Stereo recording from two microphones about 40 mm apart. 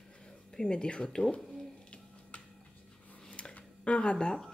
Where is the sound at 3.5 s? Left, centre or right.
Left.